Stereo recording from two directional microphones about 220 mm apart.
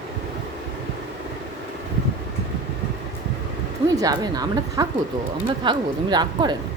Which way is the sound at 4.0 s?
15° right (ahead or behind).